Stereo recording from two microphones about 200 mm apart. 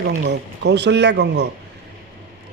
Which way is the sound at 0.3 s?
60° right (ahead or behind).